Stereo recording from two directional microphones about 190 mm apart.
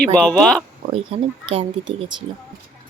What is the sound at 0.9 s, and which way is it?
Speech, 30° right (ahead or behind).